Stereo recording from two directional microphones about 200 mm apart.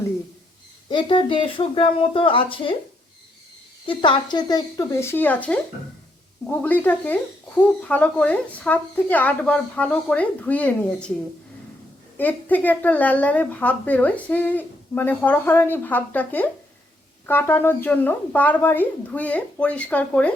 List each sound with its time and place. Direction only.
0.9 s speech: 25° left (ahead or behind)
3.8 s speech: 25° left (ahead or behind); by 11.1 s 5° left (ahead or behind)
12.1 s speech: 10° left (ahead or behind)